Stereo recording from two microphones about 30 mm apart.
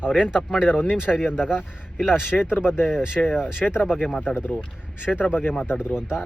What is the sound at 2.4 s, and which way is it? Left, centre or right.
Speech, left.